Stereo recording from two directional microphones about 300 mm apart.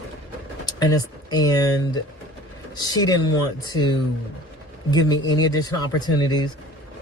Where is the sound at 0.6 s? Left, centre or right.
Centre.